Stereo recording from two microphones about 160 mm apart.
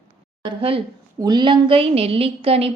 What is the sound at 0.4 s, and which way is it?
A woman's voice, 35° right (ahead or behind).